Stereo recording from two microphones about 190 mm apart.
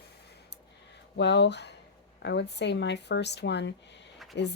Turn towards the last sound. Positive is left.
turn(degrees=65)  # may be behind; listen again after turning